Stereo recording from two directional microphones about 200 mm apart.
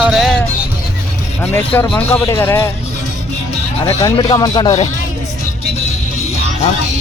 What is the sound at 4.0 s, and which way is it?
Speech, 20° left (ahead or behind).